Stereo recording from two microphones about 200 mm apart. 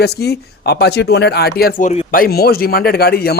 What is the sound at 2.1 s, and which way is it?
A man's voice, 50° left (ahead or behind).